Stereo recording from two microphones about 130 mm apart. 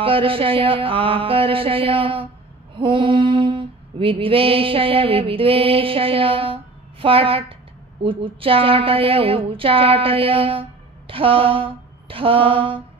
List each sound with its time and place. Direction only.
0.0 s a woman's voice: 45° right (ahead or behind)
2.8 s a sound: 40° right (ahead or behind)
8.0 s a woman's voice: 45° right (ahead or behind)